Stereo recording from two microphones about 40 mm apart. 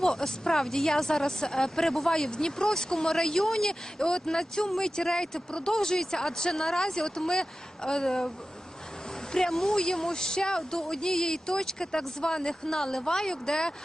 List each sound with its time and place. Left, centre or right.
0.0 s speech: centre
9.5 s speech: centre